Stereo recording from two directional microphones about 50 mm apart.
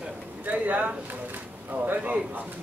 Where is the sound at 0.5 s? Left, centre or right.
Right.